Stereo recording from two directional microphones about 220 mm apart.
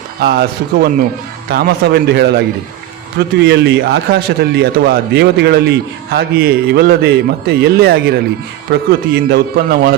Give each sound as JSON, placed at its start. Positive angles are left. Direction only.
{"t": 0.2, "sound": "a man's voice", "side_deg": -45}